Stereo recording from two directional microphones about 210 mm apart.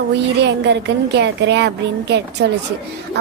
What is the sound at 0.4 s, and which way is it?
A woman's voice, 55° right (ahead or behind).